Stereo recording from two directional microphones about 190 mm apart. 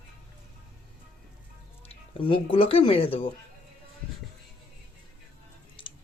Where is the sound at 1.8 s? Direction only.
30° left (ahead or behind).